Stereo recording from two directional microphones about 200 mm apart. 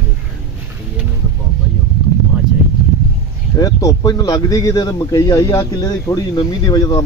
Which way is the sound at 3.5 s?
15° left (ahead or behind).